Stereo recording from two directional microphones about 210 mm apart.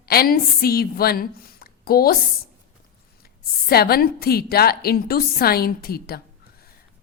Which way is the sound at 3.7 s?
45° left (ahead or behind).